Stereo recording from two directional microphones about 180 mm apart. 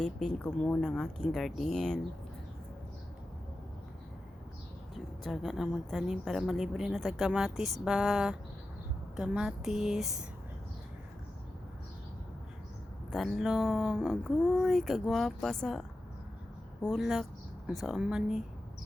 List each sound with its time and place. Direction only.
0.0 s a woman's voice: centre (ahead or behind)
4.9 s a woman's voice: centre (ahead or behind)
13.1 s a woman's voice: centre (ahead or behind)
16.8 s a woman's voice: centre (ahead or behind)